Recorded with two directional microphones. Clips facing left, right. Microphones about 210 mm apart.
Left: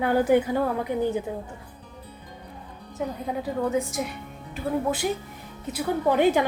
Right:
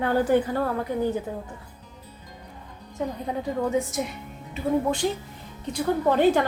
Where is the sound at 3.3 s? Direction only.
5° left (ahead or behind).